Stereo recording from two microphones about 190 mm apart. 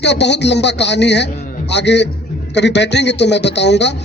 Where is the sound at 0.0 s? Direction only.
65° left (ahead or behind).